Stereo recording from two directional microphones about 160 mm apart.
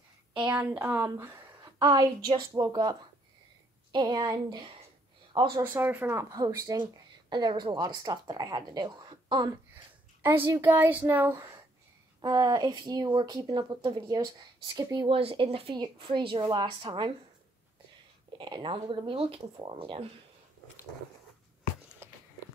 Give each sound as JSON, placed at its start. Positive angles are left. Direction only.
{"t": 0.5, "sound": "a woman's voice", "side_deg": -10}
{"t": 5.6, "sound": "a woman's voice", "side_deg": -10}
{"t": 10.2, "sound": "a woman's voice", "side_deg": -15}
{"t": 18.4, "sound": "speech", "side_deg": -30}
{"t": 22.0, "sound": "a sound", "side_deg": -15}